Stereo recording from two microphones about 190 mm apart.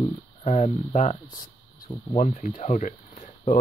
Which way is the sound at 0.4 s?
35° left (ahead or behind).